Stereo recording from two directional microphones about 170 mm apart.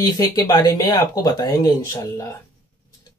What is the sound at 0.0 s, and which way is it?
Speech, 25° left (ahead or behind).